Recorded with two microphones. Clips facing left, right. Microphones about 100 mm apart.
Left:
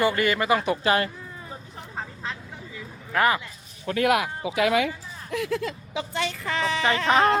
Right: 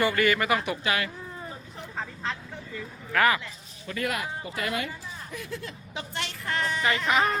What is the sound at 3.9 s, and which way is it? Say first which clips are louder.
Speech: left 8 dB; 65° left (ahead or behind).